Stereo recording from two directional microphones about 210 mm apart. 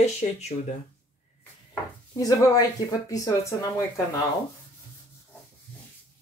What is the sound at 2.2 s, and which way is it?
A woman's voice, 15° left (ahead or behind).